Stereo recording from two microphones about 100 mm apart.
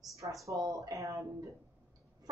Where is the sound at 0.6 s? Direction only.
35° right (ahead or behind).